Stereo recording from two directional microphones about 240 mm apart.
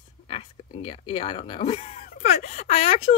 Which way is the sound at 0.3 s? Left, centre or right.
Left.